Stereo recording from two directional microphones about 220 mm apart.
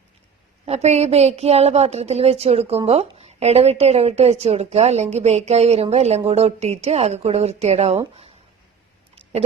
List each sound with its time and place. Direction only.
0.6 s a woman's voice: 30° right (ahead or behind)